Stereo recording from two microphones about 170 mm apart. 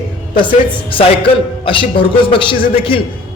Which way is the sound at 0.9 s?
30° left (ahead or behind).